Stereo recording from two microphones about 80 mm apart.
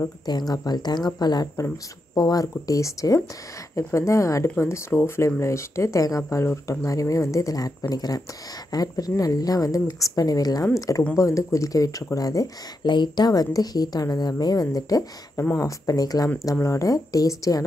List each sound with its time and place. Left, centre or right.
0.3 s speech: left
12.8 s speech: left